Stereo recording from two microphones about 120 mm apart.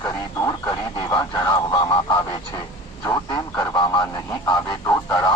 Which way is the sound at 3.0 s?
30° left (ahead or behind).